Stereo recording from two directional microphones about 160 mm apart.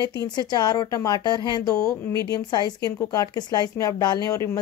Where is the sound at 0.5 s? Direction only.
25° left (ahead or behind).